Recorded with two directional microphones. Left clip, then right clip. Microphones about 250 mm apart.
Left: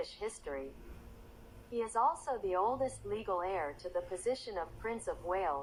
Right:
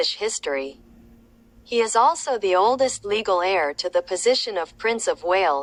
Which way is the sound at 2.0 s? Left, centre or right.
Right.